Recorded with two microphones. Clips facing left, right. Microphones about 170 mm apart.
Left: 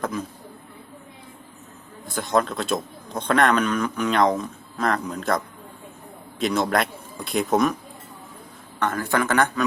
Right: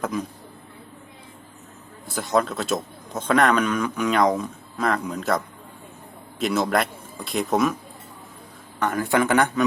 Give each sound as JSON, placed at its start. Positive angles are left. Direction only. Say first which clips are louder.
{"t": 2.0, "sound": "a man's voice", "louder": "even", "side_deg": -5}
{"t": 6.4, "sound": "speech", "louder": "even", "side_deg": -5}
{"t": 8.8, "sound": "a man's voice", "louder": "right 2 dB", "side_deg": -15}